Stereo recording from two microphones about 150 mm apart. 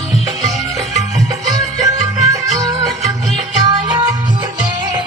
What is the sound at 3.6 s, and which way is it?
Music, 25° right (ahead or behind).